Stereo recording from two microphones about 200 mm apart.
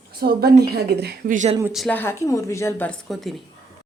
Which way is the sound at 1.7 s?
5° left (ahead or behind).